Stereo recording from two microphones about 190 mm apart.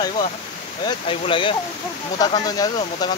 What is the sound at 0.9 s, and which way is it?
Speech, 25° left (ahead or behind).